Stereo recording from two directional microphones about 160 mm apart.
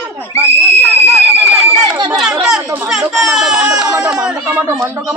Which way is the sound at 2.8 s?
5° right (ahead or behind).